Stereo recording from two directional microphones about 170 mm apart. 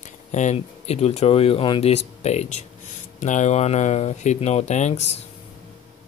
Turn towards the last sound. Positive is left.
turn(degrees=40)  # may be behind; listen again after turning